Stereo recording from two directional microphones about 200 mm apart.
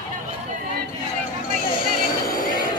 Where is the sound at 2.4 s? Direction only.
45° left (ahead or behind).